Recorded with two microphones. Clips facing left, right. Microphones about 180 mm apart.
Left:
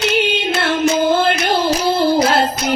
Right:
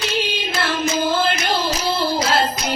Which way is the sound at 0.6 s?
60° left (ahead or behind).